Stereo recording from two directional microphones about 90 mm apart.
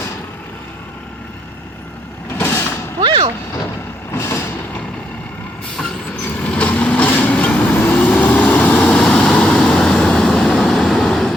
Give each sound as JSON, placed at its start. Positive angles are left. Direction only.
{"t": 2.4, "sound": "vehicle", "side_deg": 30}
{"t": 3.0, "sound": "a sound", "side_deg": -55}
{"t": 4.1, "sound": "vehicle", "side_deg": 30}
{"t": 6.2, "sound": "vehicle", "side_deg": 15}